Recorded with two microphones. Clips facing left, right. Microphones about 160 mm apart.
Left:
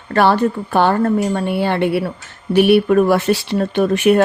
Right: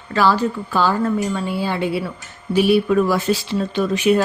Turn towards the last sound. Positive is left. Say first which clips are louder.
# left 4 dB
turn(degrees=60)  # may be behind; listen again after turning